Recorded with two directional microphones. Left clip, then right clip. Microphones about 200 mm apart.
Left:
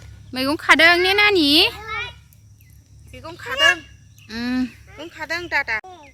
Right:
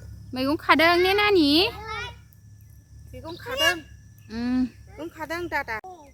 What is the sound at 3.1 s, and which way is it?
Speech, 30° right (ahead or behind).